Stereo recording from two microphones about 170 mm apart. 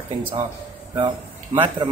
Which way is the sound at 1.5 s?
30° right (ahead or behind).